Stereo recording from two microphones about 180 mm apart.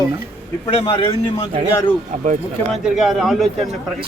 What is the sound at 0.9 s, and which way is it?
Speech, 25° left (ahead or behind).